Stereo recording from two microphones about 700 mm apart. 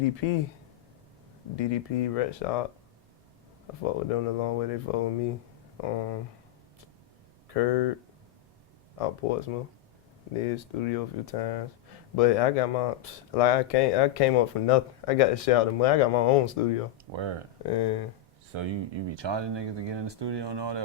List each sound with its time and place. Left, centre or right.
0.2 s speech: left
1.5 s speech: left
4.1 s speech: left
7.4 s speech: left
9.0 s speech: left
17.1 s speech: right
17.7 s speech: left
18.5 s speech: right